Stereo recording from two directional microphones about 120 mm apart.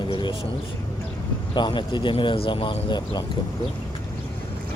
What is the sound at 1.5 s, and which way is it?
Speech, 40° left (ahead or behind).